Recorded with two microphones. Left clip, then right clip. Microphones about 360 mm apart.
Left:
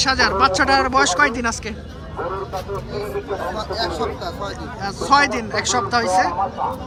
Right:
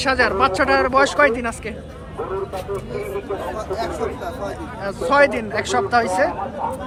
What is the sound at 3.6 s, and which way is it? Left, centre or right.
Speech, centre.